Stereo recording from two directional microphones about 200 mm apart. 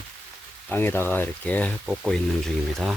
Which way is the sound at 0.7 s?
10° left (ahead or behind).